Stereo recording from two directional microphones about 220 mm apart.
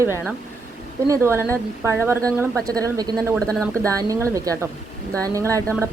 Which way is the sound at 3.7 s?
15° right (ahead or behind).